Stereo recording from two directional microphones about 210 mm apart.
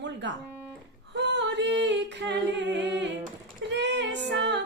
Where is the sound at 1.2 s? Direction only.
55° right (ahead or behind).